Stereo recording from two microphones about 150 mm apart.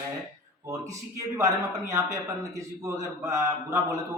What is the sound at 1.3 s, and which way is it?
A man's voice, 20° right (ahead or behind).